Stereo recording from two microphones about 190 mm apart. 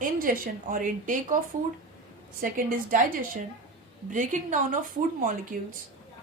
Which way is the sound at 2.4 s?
45° right (ahead or behind).